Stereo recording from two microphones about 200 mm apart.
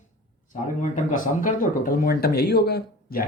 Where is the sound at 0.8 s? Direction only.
40° left (ahead or behind).